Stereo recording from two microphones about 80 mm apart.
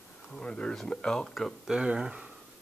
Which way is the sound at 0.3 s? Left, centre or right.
Centre.